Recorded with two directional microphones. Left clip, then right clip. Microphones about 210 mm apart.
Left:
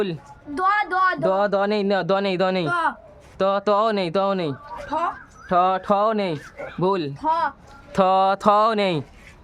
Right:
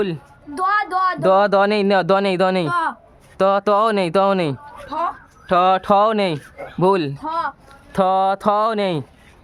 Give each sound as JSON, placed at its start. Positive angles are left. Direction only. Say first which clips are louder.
{"t": 0.5, "sound": "a woman's voice", "louder": "right 2 dB", "side_deg": 0}
{"t": 1.2, "sound": "speech", "louder": "right 6 dB", "side_deg": -45}
{"t": 2.6, "sound": "a woman's voice", "louder": "right 2 dB", "side_deg": -5}
{"t": 3.3, "sound": "speech", "louder": "right 4 dB", "side_deg": -30}
{"t": 4.9, "sound": "a woman's voice", "louder": "right 1 dB", "side_deg": 0}
{"t": 5.5, "sound": "speech", "louder": "right 4 dB", "side_deg": -35}
{"t": 7.2, "sound": "a woman's voice", "louder": "left 2 dB", "side_deg": 0}